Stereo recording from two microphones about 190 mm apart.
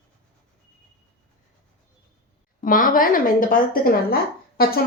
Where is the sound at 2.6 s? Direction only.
45° left (ahead or behind).